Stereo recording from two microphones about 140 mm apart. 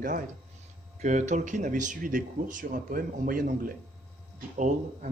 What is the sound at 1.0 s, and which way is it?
Speech, 60° right (ahead or behind).